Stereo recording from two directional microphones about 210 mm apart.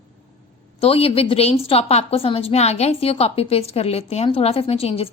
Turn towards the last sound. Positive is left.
turn(degrees=30)  # may be behind; listen again after turning